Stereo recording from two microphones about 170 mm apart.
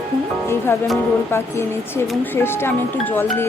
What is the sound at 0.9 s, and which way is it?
Speech, 15° left (ahead or behind).